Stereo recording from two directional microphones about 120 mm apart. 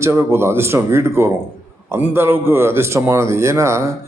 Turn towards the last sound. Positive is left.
turn(degrees=-25)  # may be behind; listen again after turning